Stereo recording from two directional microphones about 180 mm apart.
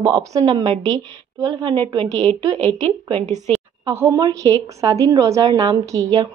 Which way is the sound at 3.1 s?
35° right (ahead or behind).